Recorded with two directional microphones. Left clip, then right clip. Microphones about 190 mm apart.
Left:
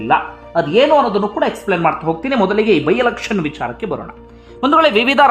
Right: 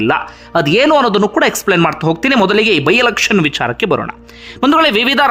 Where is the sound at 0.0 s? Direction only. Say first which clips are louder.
Even; 35° right (ahead or behind).